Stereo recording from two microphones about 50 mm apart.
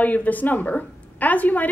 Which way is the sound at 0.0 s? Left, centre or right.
Left.